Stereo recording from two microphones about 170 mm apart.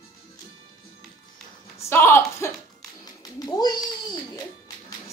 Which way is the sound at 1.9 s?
15° left (ahead or behind).